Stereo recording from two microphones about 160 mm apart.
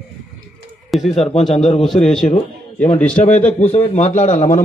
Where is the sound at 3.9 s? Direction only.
50° left (ahead or behind).